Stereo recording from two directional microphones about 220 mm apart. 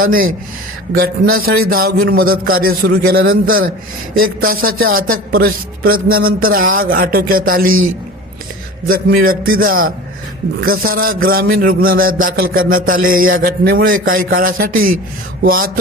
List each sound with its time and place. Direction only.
0.0 s speech: 40° right (ahead or behind)
8.9 s speech: 40° right (ahead or behind)